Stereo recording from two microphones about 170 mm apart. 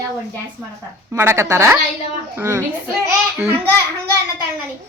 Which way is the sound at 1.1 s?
15° right (ahead or behind).